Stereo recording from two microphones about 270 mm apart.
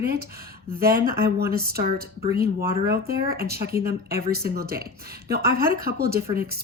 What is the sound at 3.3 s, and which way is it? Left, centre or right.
Speech, right.